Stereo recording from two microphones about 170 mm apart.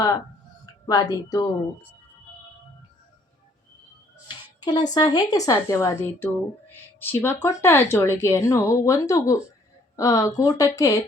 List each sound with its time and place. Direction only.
0.6 s a woman's voice: 25° left (ahead or behind)
4.6 s a woman's voice: 25° left (ahead or behind)